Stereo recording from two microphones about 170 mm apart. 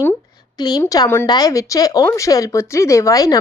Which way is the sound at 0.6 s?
25° left (ahead or behind).